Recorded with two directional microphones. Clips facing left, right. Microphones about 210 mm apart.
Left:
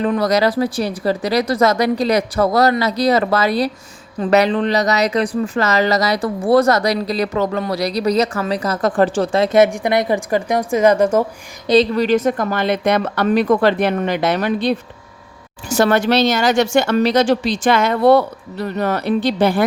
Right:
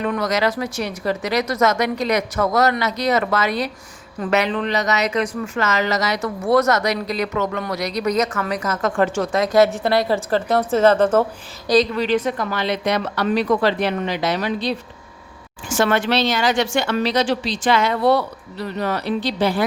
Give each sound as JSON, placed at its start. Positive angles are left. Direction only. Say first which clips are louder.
{"t": 0.0, "sound": "speech", "louder": "left 5 dB", "side_deg": 35}
{"t": 11.9, "sound": "speech", "louder": "left 4 dB", "side_deg": 45}
{"t": 15.7, "sound": "speech", "louder": "left 4 dB", "side_deg": 40}